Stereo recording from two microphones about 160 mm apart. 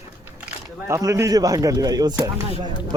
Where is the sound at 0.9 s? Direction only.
20° right (ahead or behind).